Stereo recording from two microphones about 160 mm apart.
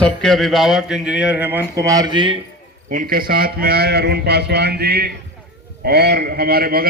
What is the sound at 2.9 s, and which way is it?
A man's voice, 60° right (ahead or behind).